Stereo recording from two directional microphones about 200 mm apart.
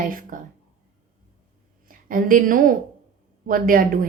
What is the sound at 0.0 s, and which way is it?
Speech, 45° right (ahead or behind).